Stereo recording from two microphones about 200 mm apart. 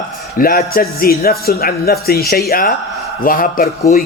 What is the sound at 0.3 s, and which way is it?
A man's voice, 45° left (ahead or behind).